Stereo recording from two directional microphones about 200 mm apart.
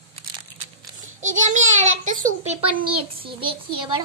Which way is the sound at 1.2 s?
40° right (ahead or behind).